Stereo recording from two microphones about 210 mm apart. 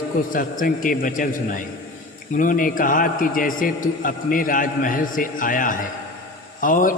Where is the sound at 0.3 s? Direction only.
40° left (ahead or behind).